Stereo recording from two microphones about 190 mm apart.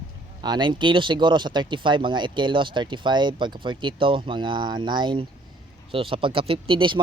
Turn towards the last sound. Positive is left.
turn(degrees=-25)  # may be behind; listen again after turning